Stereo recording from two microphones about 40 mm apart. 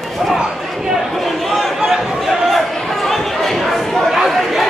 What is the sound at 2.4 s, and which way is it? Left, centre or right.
Chatter, centre.